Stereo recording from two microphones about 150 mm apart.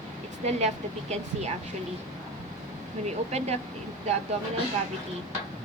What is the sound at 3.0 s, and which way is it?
Speech, 45° right (ahead or behind).